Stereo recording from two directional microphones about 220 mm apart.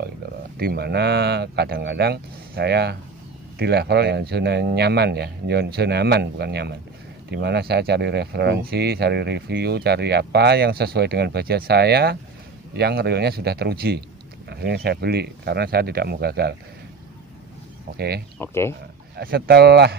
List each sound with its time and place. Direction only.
0.6 s speech: 45° right (ahead or behind)
17.9 s speech: 45° right (ahead or behind)
18.4 s speech: 10° left (ahead or behind)
19.1 s speech: 45° right (ahead or behind)